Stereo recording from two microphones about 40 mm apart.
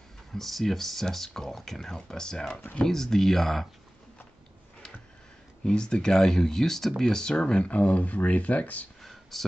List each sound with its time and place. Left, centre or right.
0.3 s speech: centre
5.6 s speech: left
7.6 s speech: left
9.3 s speech: centre